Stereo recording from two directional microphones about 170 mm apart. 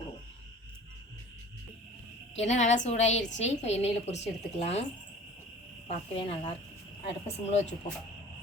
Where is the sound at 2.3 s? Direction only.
45° left (ahead or behind).